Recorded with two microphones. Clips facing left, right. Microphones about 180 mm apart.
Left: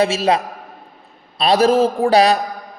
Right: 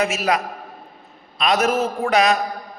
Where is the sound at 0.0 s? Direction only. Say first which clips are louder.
Left 4 dB; 30° left (ahead or behind).